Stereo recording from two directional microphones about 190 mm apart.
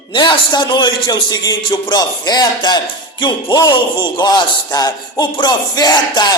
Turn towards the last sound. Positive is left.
turn(degrees=20)  # may be behind; listen again after turning